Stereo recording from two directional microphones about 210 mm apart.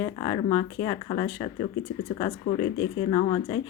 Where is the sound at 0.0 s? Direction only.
20° left (ahead or behind).